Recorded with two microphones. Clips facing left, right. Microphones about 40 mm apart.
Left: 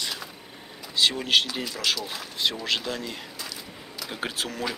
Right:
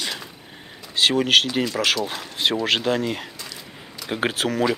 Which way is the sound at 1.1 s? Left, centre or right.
Right.